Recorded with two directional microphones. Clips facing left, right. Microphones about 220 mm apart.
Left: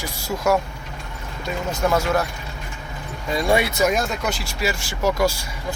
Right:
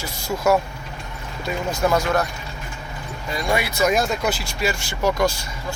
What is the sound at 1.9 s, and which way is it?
Speech, 5° left (ahead or behind).